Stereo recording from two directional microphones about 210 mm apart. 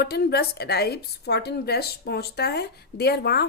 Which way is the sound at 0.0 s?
50° left (ahead or behind).